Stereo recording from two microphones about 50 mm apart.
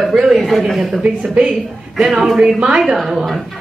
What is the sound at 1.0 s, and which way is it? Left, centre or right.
Speech, centre.